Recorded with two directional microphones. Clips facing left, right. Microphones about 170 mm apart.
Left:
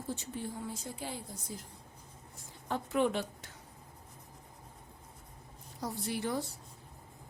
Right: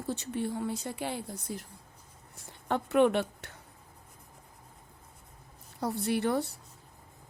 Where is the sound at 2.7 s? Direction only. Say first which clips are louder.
Right 6 dB; 65° right (ahead or behind).